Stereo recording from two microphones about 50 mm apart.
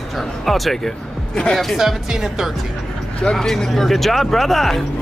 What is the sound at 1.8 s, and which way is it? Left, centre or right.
Speech, centre.